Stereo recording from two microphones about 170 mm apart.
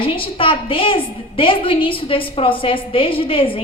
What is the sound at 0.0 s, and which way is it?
A woman's voice, 30° left (ahead or behind).